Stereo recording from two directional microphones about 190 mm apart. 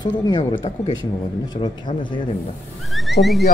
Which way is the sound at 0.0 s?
20° left (ahead or behind).